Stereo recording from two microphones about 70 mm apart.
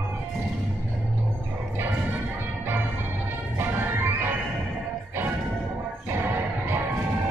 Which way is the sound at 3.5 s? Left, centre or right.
Right.